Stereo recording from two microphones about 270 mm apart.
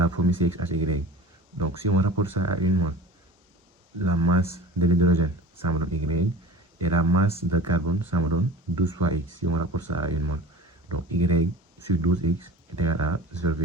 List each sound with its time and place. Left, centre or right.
0.0 s speech: right
4.0 s speech: right